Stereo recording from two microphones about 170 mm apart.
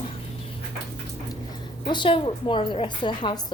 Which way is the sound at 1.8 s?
30° left (ahead or behind).